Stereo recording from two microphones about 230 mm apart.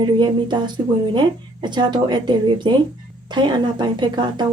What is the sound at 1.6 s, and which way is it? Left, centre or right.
A woman's voice, centre.